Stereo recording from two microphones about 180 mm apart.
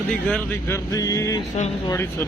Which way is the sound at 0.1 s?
5° left (ahead or behind).